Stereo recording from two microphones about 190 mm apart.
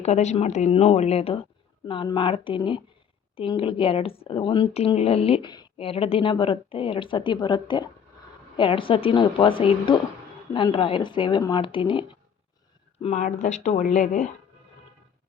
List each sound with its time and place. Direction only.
0.0 s speech: 35° left (ahead or behind)
13.0 s speech: 35° left (ahead or behind)